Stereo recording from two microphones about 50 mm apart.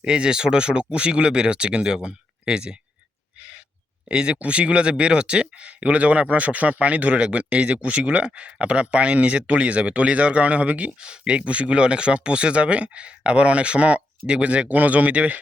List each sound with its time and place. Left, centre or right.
0.0 s speech: centre
4.1 s speech: centre